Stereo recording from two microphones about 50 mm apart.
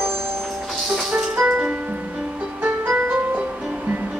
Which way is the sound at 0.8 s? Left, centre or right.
Centre.